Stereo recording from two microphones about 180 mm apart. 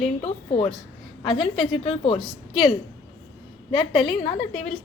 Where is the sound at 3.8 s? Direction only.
30° left (ahead or behind).